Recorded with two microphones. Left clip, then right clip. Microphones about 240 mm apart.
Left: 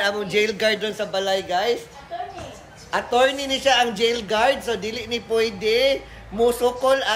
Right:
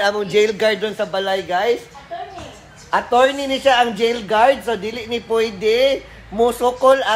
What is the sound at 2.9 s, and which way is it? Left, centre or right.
Speech, centre.